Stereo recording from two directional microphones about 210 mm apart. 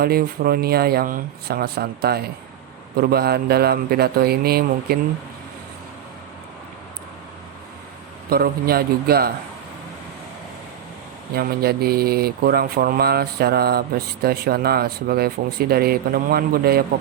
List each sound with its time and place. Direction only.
0.0 s mantra: 45° right (ahead or behind)
8.3 s mantra: 45° right (ahead or behind)
11.3 s mantra: 50° right (ahead or behind)